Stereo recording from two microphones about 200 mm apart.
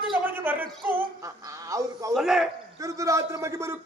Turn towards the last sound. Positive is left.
turn(degrees=-15)  # may be behind; listen again after turning